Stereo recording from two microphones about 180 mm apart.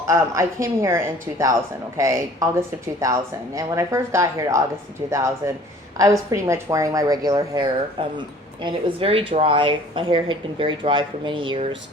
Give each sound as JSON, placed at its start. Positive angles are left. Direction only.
{"t": 0.1, "sound": "a woman's voice", "side_deg": -15}